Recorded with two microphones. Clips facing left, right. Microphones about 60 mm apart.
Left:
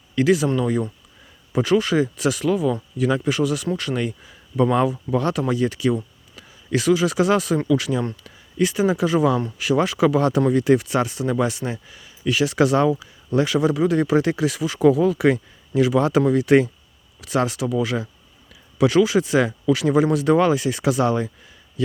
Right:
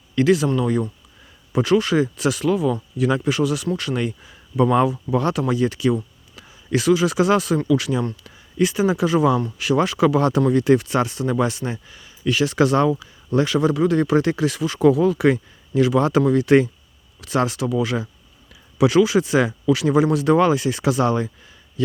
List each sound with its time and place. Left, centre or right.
0.2 s speech: centre